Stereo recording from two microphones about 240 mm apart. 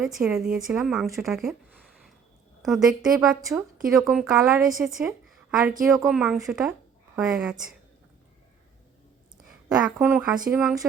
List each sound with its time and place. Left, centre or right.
0.0 s speech: centre
2.6 s speech: centre
9.5 s a woman's voice: centre